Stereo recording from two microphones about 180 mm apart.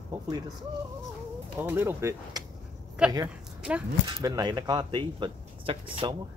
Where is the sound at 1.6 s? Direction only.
10° right (ahead or behind).